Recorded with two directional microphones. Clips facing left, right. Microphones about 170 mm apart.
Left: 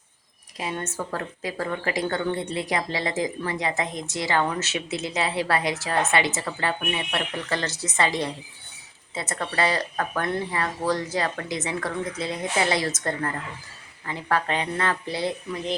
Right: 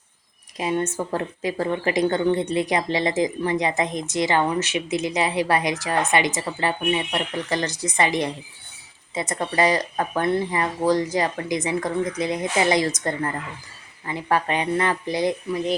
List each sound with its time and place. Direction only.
0.5 s speech: 20° right (ahead or behind)